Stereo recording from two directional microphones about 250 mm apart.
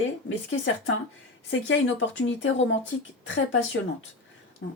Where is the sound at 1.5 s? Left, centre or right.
Left.